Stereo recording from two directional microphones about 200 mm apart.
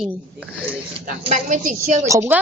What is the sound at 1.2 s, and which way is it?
Speech, 40° right (ahead or behind).